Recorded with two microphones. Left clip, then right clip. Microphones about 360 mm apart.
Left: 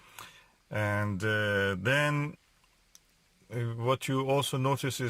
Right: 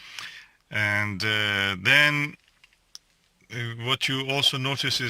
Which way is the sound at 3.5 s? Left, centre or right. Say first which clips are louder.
Right 3 dB; centre.